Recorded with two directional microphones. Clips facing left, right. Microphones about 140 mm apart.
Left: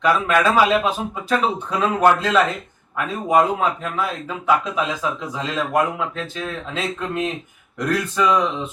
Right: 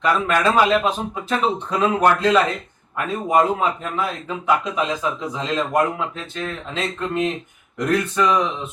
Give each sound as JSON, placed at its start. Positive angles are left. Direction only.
{"t": 0.0, "sound": "speech", "side_deg": 5}